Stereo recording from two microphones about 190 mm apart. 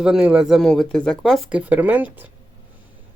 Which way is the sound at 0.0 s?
5° right (ahead or behind).